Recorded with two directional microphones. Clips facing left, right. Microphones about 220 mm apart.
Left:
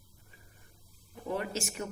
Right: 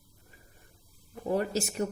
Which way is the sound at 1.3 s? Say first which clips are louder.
Right 6 dB; 40° right (ahead or behind).